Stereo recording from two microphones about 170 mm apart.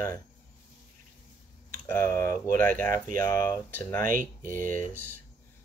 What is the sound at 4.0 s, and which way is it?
Speech, 55° right (ahead or behind).